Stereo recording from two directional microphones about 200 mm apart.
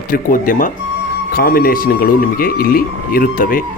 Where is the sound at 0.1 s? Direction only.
45° left (ahead or behind).